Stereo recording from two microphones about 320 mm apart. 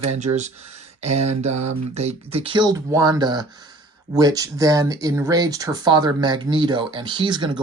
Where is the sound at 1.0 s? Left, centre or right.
Centre.